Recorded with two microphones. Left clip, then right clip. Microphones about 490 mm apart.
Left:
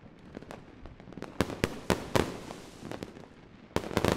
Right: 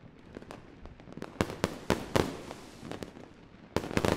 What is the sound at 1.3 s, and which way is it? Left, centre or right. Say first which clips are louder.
Fireworks: left 1 dB; left.